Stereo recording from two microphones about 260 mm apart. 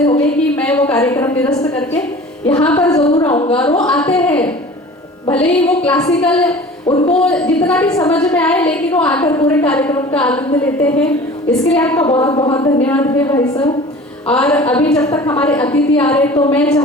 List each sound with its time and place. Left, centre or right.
0.3 s a sound: centre
2.5 s a woman's voice: centre
4.2 s a woman's voice: centre
6.8 s speech: left
7.2 s a woman's voice: centre